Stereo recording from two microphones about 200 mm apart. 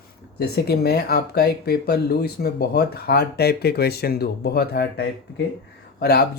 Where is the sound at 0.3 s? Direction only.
55° left (ahead or behind).